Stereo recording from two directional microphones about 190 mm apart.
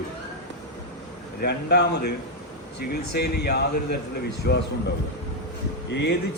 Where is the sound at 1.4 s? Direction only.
60° left (ahead or behind).